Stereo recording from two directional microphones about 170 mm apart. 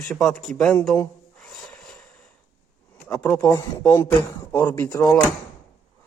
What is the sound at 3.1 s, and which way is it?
Speech, 5° left (ahead or behind).